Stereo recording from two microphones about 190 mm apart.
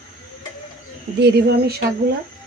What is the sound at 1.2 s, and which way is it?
Speech, 60° right (ahead or behind).